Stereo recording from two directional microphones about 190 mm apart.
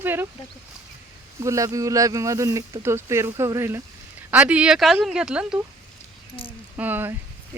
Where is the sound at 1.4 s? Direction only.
15° right (ahead or behind).